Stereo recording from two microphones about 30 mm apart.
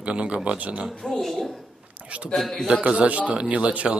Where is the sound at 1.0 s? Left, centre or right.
Centre.